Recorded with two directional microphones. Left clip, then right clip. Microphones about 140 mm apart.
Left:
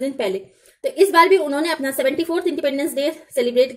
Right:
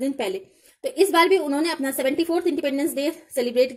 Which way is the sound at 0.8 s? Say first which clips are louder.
Left 4 dB; 25° right (ahead or behind).